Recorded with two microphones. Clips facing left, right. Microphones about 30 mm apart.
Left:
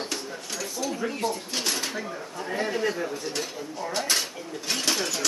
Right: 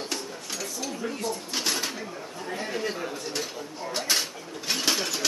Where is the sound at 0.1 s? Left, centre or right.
Centre.